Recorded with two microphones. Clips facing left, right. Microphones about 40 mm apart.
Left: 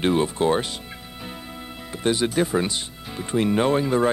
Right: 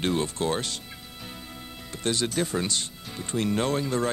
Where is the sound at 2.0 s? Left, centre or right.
Centre.